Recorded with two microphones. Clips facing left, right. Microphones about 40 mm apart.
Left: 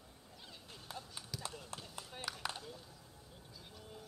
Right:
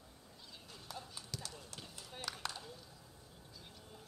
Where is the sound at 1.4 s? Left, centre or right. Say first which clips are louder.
Left 4 dB; left.